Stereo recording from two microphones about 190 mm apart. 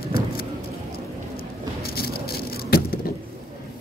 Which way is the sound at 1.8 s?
55° left (ahead or behind).